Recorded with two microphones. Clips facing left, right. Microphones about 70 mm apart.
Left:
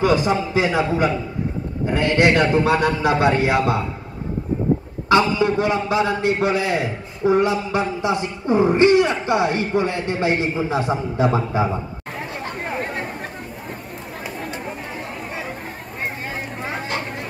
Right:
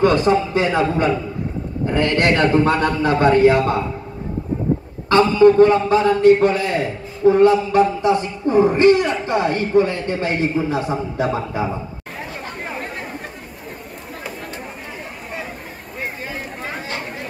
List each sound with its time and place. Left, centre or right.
0.0 s a man's voice: centre
5.1 s a man's voice: centre